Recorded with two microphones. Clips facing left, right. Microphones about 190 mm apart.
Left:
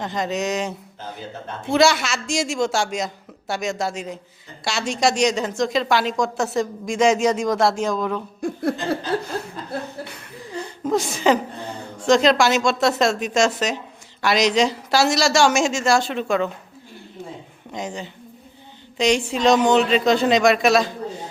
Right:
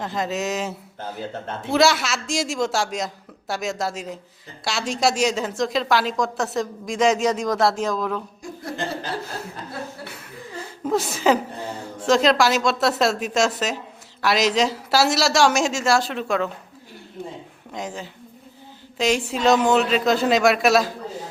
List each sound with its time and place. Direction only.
0.0 s a woman's voice: centre (ahead or behind)
8.4 s speech: 60° left (ahead or behind)
10.2 s a sound: 5° right (ahead or behind)
12.0 s a woman's voice: centre (ahead or behind)
17.7 s a woman's voice: centre (ahead or behind)